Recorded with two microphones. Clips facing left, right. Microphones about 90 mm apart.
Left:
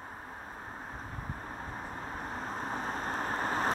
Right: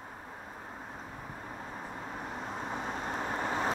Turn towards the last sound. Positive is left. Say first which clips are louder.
# left 1 dB
turn(degrees=40)  # may be behind; listen again after turning